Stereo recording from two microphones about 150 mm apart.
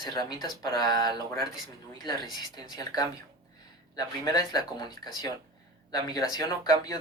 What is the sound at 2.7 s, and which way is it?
Speech, 25° left (ahead or behind).